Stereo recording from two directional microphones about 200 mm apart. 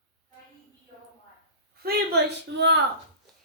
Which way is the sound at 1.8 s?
55° right (ahead or behind).